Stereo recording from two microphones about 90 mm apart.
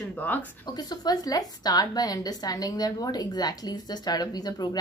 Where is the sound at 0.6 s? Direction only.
50° left (ahead or behind).